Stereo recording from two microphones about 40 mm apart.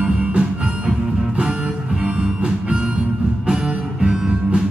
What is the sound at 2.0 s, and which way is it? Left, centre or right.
Music, right.